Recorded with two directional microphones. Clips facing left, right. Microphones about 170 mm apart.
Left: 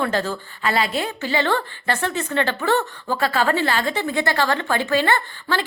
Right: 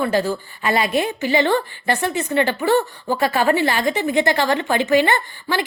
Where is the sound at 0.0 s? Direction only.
10° right (ahead or behind).